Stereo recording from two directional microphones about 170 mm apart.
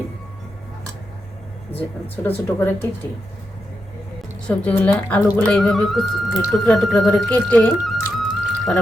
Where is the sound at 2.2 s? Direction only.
10° left (ahead or behind).